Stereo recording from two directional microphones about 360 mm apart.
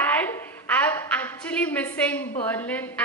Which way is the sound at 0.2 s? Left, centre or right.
Centre.